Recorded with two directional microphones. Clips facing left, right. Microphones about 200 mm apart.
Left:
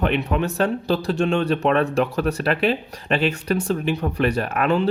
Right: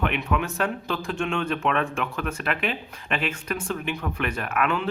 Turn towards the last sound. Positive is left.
turn(degrees=35)  # may be behind; listen again after turning